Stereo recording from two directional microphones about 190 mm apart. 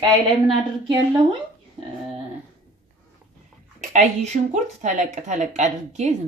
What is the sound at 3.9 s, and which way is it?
Speech, 40° right (ahead or behind).